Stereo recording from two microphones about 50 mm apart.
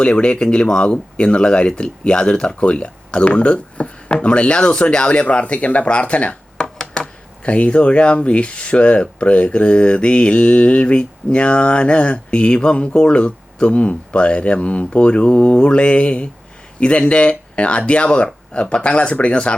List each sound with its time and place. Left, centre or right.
0.0 s speech: centre
6.7 s a sound: centre
7.4 s speech: left